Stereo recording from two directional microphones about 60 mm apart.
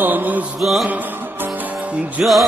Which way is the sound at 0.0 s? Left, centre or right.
Right.